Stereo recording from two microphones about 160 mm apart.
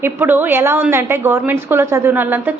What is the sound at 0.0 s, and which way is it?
A woman's voice, 10° right (ahead or behind).